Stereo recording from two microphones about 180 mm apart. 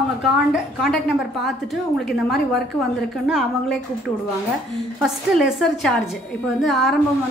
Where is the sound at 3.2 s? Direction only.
Centre (ahead or behind).